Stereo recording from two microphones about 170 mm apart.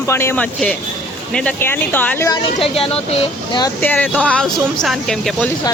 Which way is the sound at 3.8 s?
10° left (ahead or behind).